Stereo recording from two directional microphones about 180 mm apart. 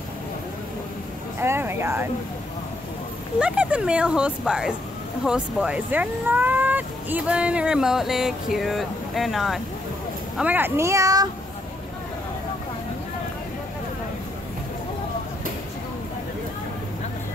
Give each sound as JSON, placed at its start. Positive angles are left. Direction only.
{"t": 1.4, "sound": "speech", "side_deg": -15}
{"t": 3.3, "sound": "speech", "side_deg": -5}